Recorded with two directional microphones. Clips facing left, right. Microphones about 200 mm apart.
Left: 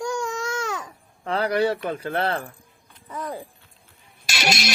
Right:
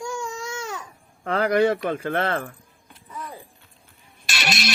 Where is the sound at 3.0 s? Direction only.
90° left.